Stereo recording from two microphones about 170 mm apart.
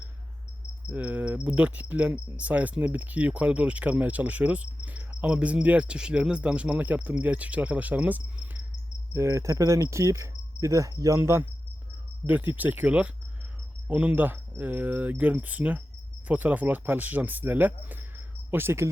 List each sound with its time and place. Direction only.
0.9 s speech: 10° right (ahead or behind)